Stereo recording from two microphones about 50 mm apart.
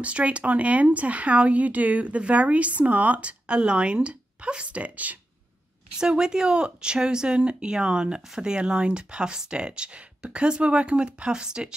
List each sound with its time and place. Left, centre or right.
0.0 s speech: right
5.9 s speech: centre